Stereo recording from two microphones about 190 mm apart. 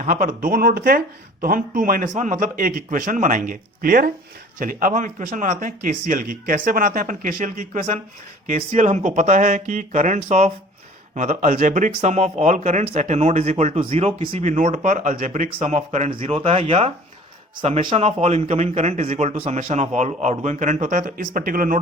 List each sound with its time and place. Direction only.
0.0 s speech: 45° right (ahead or behind)
16.2 s speech: 30° right (ahead or behind); by 21.8 s 50° right (ahead or behind)